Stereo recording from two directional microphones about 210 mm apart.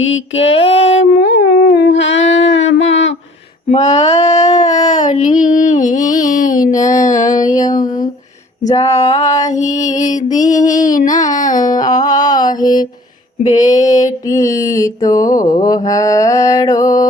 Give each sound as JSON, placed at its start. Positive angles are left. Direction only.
{"t": 0.3, "sound": "mantra", "side_deg": 30}
{"t": 1.2, "sound": "a sound", "side_deg": 50}
{"t": 3.7, "sound": "child singing", "side_deg": 30}
{"t": 6.8, "sound": "music", "side_deg": 35}
{"t": 7.4, "sound": "mantra", "side_deg": 20}
{"t": 7.7, "sound": "music", "side_deg": 40}
{"t": 9.2, "sound": "mantra", "side_deg": 15}
{"t": 9.5, "sound": "music", "side_deg": 35}
{"t": 11.6, "sound": "mantra", "side_deg": 20}